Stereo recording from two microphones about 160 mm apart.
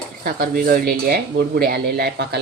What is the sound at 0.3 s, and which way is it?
Speech, 65° right (ahead or behind).